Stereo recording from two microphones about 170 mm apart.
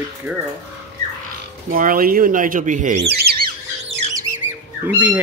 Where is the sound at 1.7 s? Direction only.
55° right (ahead or behind).